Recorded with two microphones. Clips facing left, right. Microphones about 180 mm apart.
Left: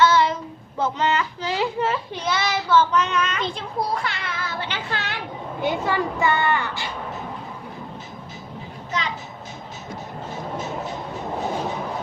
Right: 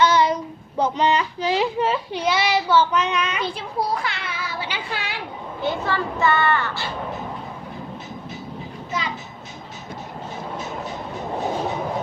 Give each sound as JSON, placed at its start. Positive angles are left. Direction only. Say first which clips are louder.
{"t": 0.0, "sound": "child singing", "louder": "even", "side_deg": -15}
{"t": 0.8, "sound": "speech", "louder": "right 3 dB", "side_deg": -15}
{"t": 5.6, "sound": "speech", "louder": "left 1 dB", "side_deg": 15}